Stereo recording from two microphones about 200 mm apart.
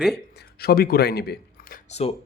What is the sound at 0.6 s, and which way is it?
Speech, 50° left (ahead or behind).